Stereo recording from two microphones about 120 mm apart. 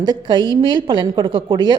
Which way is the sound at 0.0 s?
40° right (ahead or behind).